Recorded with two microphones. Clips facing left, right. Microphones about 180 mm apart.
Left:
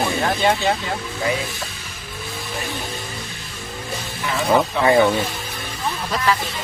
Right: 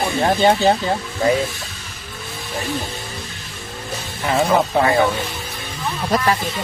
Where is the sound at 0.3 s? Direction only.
30° right (ahead or behind).